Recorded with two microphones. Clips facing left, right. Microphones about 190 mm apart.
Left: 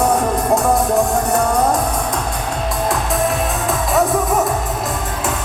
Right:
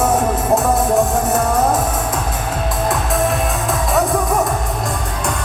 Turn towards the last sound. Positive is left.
turn(degrees=0)  # may be behind; listen again after turning